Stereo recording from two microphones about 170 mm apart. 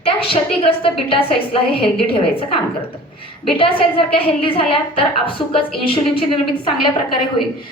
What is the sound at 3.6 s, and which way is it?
A woman's voice, 35° left (ahead or behind).